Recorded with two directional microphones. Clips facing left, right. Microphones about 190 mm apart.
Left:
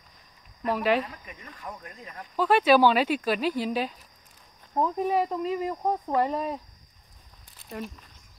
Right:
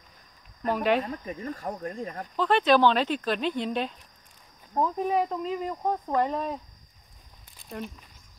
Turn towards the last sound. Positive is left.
turn(degrees=0)  # may be behind; listen again after turning